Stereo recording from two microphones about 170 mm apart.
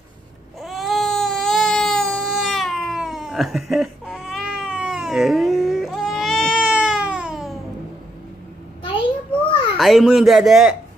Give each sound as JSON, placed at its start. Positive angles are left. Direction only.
{"t": 0.6, "sound": "baby cry", "side_deg": 0}
{"t": 8.8, "sound": "a sound", "side_deg": 30}
{"t": 9.8, "sound": "speech", "side_deg": 0}